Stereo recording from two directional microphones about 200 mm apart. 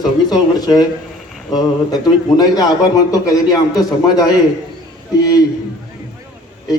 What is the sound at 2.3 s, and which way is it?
A man's voice, 20° left (ahead or behind).